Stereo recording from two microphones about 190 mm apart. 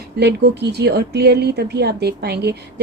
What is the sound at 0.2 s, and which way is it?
Speech, 65° right (ahead or behind).